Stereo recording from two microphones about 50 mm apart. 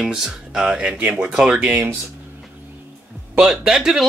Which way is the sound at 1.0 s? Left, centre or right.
Right.